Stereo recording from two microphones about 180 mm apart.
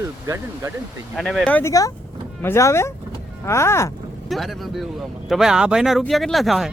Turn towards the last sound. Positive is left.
turn(degrees=0)  # may be behind; listen again after turning